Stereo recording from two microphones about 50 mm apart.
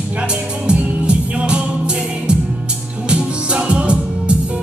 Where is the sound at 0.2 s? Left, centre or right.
Right.